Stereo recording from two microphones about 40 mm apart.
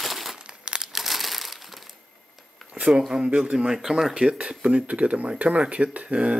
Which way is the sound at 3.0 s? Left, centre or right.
Centre.